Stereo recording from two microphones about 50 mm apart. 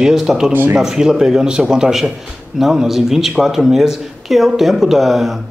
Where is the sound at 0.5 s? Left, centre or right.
Right.